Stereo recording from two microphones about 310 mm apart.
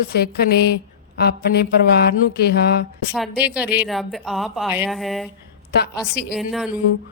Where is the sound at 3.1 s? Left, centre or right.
Centre.